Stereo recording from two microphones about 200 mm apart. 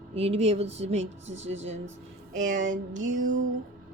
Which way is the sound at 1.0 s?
70° right (ahead or behind).